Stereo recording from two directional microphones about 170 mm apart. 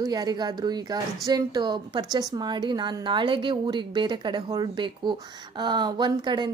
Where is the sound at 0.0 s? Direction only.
25° right (ahead or behind).